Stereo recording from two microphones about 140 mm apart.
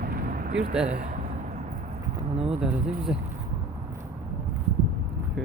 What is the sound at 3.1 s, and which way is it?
Speech, 5° right (ahead or behind).